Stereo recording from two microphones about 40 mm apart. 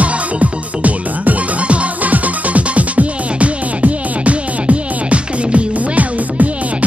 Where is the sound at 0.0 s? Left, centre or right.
Right.